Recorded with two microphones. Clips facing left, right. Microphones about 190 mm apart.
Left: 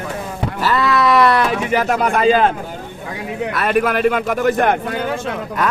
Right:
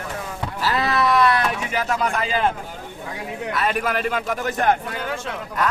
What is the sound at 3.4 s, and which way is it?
Speech, 65° left (ahead or behind).